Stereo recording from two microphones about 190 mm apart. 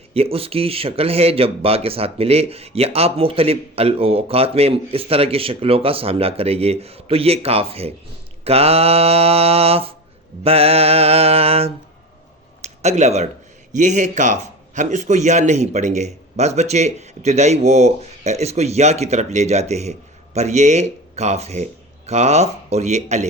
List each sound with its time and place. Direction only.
0.1 s a man's voice: 30° right (ahead or behind)